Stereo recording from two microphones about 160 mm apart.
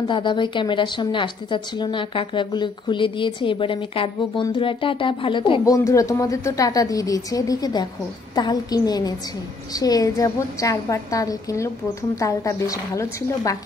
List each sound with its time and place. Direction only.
0.1 s a woman's voice: 30° left (ahead or behind)
5.9 s a woman's voice: 20° left (ahead or behind)